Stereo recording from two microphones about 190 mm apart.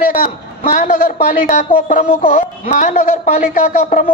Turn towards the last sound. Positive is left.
turn(degrees=45)  # may be behind; listen again after turning